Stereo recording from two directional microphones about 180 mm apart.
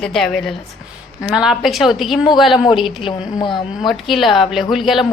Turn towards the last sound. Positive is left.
turn(degrees=0)  # may be behind; listen again after turning